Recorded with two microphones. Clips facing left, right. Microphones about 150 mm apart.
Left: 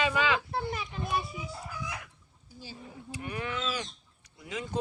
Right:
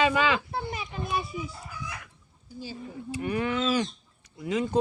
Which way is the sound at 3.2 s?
65° right (ahead or behind).